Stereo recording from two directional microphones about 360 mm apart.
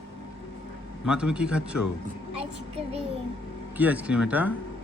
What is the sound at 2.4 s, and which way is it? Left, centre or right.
Speech, centre.